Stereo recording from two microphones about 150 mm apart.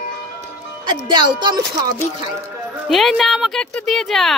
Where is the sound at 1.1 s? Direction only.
30° right (ahead or behind).